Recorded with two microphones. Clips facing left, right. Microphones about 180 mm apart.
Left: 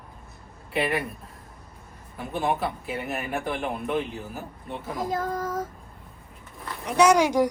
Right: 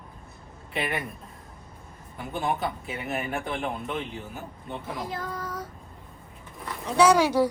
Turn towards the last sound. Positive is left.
turn(degrees=15)  # may be behind; listen again after turning